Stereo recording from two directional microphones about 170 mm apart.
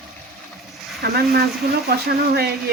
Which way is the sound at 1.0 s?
65° right (ahead or behind).